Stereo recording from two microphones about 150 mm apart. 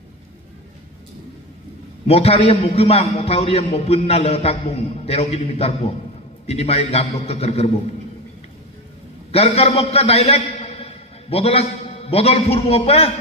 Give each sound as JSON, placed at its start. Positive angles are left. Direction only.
{"t": 2.0, "sound": "a man's voice", "side_deg": 45}
{"t": 9.3, "sound": "a man's voice", "side_deg": 40}